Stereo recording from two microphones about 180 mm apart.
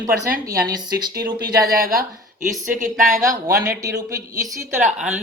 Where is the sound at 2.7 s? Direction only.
45° right (ahead or behind).